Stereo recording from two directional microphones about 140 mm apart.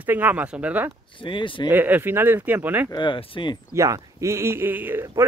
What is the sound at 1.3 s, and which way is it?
Speech, 35° left (ahead or behind).